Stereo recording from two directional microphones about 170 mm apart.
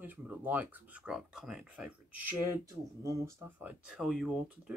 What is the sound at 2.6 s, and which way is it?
Speech, 20° right (ahead or behind).